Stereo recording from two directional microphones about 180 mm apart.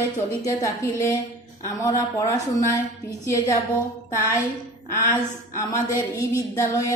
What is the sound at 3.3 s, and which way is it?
Speech, 15° left (ahead or behind).